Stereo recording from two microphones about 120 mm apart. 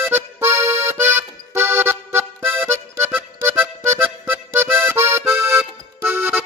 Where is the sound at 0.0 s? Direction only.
20° right (ahead or behind).